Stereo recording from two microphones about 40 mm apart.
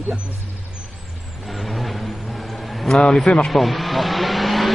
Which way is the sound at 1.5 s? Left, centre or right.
Centre.